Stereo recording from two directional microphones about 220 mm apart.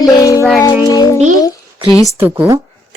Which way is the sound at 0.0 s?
15° left (ahead or behind).